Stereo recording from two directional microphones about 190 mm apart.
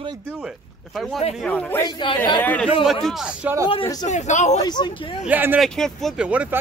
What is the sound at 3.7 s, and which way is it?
Speech, 25° left (ahead or behind).